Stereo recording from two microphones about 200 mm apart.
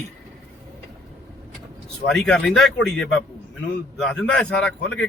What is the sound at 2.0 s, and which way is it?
A man's voice, 5° left (ahead or behind).